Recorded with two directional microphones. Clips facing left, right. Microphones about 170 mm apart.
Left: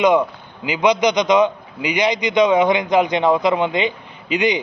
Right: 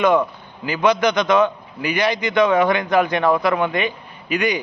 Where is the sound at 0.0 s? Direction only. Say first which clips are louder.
Left 1 dB; 15° left (ahead or behind).